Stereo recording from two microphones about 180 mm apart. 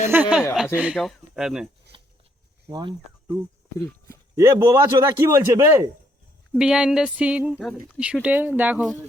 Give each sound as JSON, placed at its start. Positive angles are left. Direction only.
{"t": 0.1, "sound": "a man's voice", "side_deg": -10}
{"t": 1.9, "sound": "a sound", "side_deg": -30}
{"t": 2.6, "sound": "speech", "side_deg": -25}
{"t": 4.4, "sound": "a man's voice", "side_deg": -15}
{"t": 6.5, "sound": "a man's voice", "side_deg": -5}